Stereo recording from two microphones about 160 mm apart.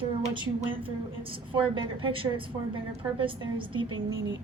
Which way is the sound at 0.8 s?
35° right (ahead or behind).